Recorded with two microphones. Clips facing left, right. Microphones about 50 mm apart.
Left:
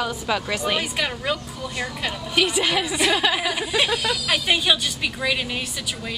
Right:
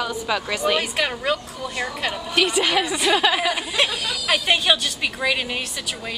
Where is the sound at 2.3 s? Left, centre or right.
Centre.